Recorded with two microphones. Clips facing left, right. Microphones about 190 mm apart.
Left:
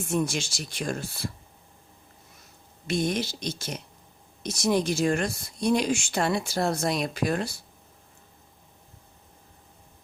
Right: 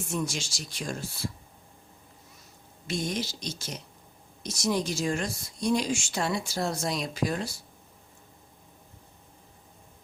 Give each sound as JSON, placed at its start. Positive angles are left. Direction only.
{"t": 0.1, "sound": "speech", "side_deg": 55}
{"t": 2.8, "sound": "speech", "side_deg": 60}